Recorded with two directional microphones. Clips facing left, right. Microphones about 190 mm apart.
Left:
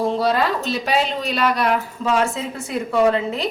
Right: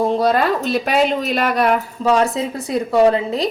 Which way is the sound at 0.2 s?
50° right (ahead or behind).